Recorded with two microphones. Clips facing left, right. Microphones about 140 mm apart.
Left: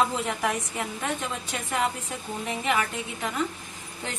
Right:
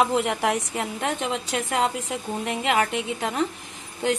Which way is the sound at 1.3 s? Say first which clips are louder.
Right 5 dB; 80° right.